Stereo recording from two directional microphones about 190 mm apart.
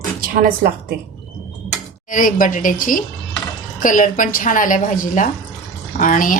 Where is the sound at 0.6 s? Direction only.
55° right (ahead or behind).